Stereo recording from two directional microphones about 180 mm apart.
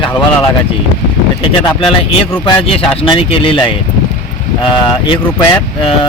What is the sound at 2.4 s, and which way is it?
A man's voice, 30° left (ahead or behind).